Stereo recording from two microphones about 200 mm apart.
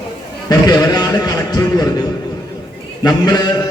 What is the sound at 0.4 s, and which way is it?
A man's voice, 20° left (ahead or behind).